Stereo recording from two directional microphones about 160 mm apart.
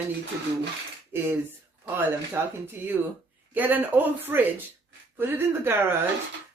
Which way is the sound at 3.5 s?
10° right (ahead or behind).